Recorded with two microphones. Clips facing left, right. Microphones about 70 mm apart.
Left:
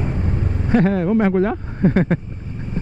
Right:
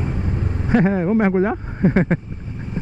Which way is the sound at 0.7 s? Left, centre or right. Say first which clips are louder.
Even; centre.